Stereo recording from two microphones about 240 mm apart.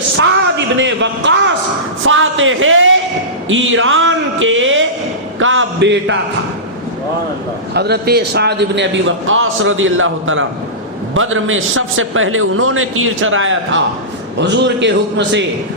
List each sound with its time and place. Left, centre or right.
0.2 s a man's voice: right
3.5 s a sound: right
7.7 s a man's voice: right